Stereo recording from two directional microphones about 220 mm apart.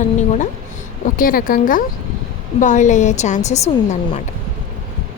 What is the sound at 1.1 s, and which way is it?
A woman's voice, 40° left (ahead or behind).